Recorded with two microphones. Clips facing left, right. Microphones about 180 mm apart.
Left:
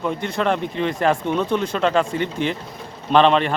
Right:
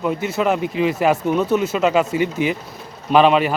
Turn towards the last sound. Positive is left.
turn(degrees=-5)  # may be behind; listen again after turning